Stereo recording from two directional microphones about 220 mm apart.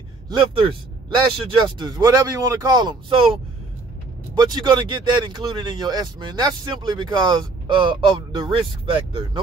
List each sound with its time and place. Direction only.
0.4 s speech: 20° right (ahead or behind)
4.4 s speech: 20° right (ahead or behind)